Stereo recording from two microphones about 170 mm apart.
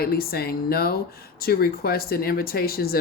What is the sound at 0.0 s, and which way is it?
Speech, 65° left (ahead or behind).